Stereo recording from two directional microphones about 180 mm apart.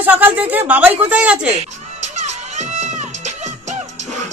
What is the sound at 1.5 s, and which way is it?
Music, 40° right (ahead or behind).